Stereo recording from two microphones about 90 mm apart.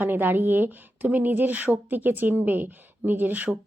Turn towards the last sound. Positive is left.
turn(degrees=-20)  # may be behind; listen again after turning